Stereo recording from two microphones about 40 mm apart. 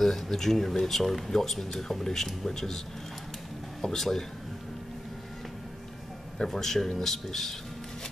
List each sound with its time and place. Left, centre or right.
0.0 s speech: centre
3.8 s speech: centre
6.3 s speech: centre